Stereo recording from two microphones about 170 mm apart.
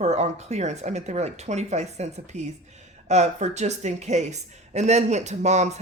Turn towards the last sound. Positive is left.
turn(degrees=-40)  # may be behind; listen again after turning